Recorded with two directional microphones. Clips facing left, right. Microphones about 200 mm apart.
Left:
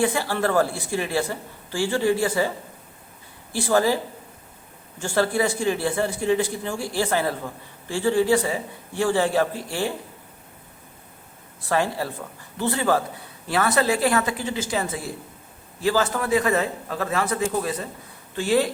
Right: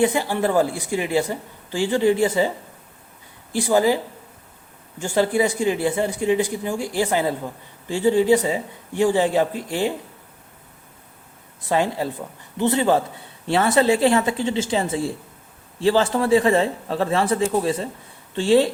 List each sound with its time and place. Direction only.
0.0 s speech: 20° right (ahead or behind)
3.5 s speech: 15° right (ahead or behind)
11.7 s a man's voice: 20° right (ahead or behind)